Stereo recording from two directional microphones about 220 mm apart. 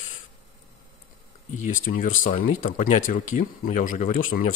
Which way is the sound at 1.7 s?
35° left (ahead or behind).